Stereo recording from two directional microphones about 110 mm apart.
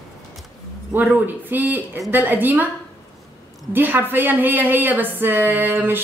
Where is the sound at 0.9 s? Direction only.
15° right (ahead or behind).